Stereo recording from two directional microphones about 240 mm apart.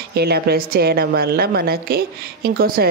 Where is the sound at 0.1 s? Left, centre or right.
Right.